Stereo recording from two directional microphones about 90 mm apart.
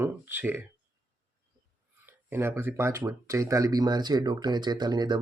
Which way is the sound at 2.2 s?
25° right (ahead or behind).